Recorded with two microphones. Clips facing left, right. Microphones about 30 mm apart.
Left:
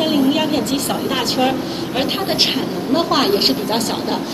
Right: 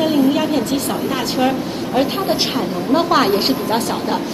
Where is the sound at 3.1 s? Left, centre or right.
Left.